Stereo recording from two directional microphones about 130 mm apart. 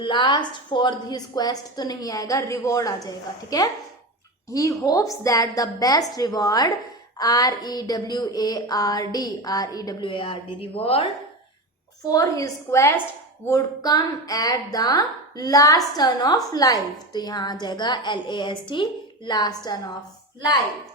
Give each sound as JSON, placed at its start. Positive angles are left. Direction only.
{"t": 0.0, "sound": "a woman's voice", "side_deg": 35}
{"t": 10.0, "sound": "a woman's voice", "side_deg": 40}
{"t": 12.0, "sound": "a woman's voice", "side_deg": 25}